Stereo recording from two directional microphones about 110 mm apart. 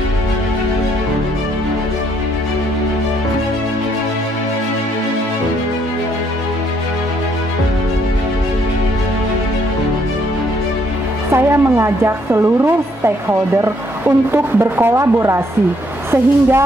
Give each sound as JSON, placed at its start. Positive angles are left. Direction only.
{"t": 11.3, "sound": "a woman's voice", "side_deg": -25}